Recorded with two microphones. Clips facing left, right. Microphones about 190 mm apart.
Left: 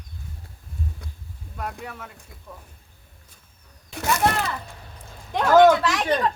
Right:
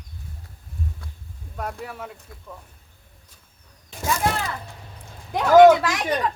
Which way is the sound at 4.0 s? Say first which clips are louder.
Left 1 dB; 70° left (ahead or behind).